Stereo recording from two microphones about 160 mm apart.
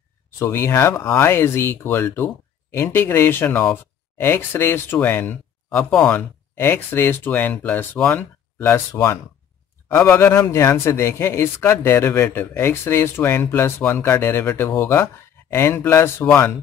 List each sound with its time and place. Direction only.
0.4 s speech: 15° left (ahead or behind)